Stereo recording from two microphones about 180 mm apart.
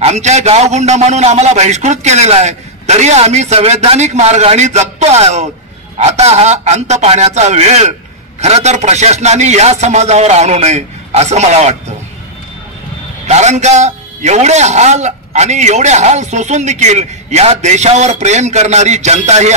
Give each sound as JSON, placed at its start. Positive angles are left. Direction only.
{"t": 0.0, "sound": "a man's voice", "side_deg": -40}
{"t": 13.3, "sound": "a man's voice", "side_deg": -40}